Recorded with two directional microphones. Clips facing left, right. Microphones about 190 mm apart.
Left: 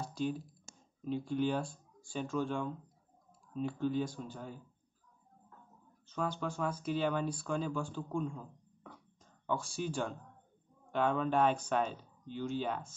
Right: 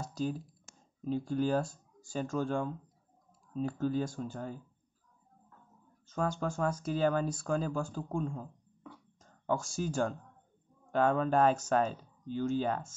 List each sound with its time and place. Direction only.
0.0 s computer keyboard: 40° right (ahead or behind)
1.0 s speech: 40° right (ahead or behind)
6.0 s speech: 45° right (ahead or behind)